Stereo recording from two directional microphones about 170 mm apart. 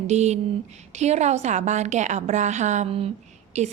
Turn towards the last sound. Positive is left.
turn(degrees=-40)  # may be behind; listen again after turning